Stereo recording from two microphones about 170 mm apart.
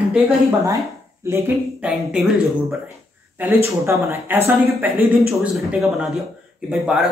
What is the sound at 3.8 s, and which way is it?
Speech, 15° right (ahead or behind).